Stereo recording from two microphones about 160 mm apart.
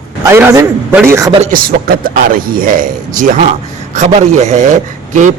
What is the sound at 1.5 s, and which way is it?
Speech, 65° right (ahead or behind).